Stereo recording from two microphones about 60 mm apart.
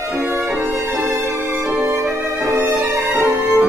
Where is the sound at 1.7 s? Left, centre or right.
Right.